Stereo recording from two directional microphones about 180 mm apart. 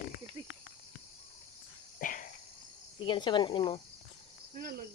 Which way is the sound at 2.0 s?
50° left (ahead or behind).